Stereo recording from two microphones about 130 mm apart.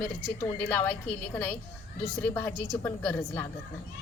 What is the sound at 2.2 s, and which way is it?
Speech, 15° left (ahead or behind).